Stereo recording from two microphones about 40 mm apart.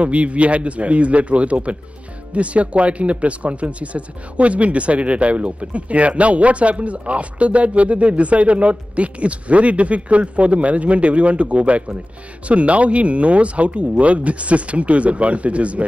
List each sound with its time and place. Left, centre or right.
0.0 s speech: right